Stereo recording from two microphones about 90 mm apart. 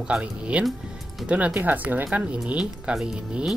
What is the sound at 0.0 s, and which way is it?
Speech, 10° right (ahead or behind).